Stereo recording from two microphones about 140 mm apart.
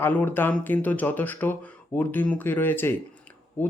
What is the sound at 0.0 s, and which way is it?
Speech, 15° left (ahead or behind).